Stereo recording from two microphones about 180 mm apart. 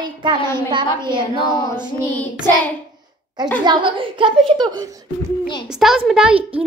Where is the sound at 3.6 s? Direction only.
25° right (ahead or behind).